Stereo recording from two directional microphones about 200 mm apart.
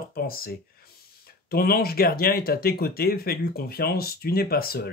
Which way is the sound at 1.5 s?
50° left (ahead or behind).